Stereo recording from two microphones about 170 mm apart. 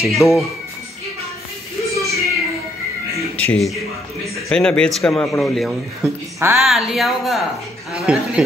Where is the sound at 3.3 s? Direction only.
5° left (ahead or behind).